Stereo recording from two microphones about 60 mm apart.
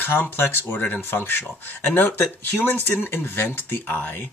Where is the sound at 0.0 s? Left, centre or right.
Left.